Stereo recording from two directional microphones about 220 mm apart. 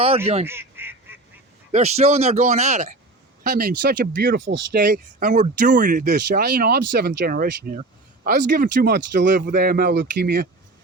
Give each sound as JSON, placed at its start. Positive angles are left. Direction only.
{"t": 0.4, "sound": "goose", "side_deg": -10}
{"t": 1.7, "sound": "speech", "side_deg": -30}
{"t": 4.4, "sound": "speech", "side_deg": -55}
{"t": 4.8, "sound": "speech", "side_deg": -40}